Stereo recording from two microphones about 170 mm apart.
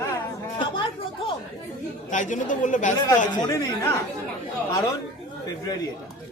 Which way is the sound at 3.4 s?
20° left (ahead or behind).